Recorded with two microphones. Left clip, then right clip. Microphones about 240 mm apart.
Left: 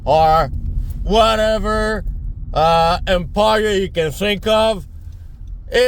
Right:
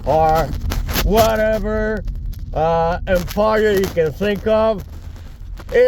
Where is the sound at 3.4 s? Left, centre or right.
Left.